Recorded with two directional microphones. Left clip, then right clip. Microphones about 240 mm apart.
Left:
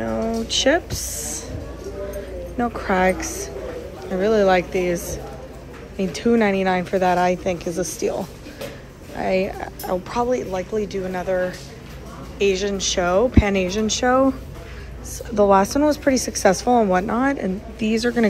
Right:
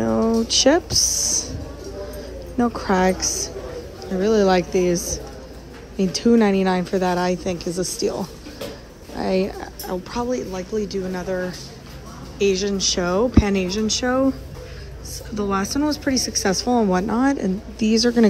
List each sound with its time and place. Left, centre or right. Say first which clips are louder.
0.0 s a sound: right 4 dB; centre
2.5 s speech: right 1 dB; centre
15.3 s speech: left 8 dB; centre